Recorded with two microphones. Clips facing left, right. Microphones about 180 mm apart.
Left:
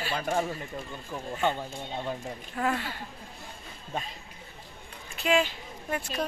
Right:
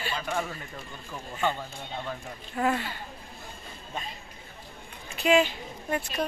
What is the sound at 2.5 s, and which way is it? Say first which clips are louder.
Speech: right 3 dB; 5° right (ahead or behind).